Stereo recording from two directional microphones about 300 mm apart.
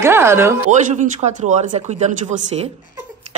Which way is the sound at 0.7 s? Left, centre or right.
Right.